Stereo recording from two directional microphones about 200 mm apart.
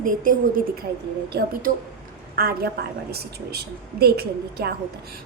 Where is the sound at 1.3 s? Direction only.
50° right (ahead or behind).